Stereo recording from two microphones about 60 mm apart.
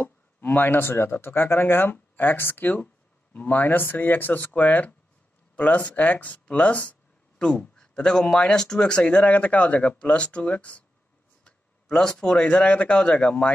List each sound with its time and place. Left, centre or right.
0.0 s speech: left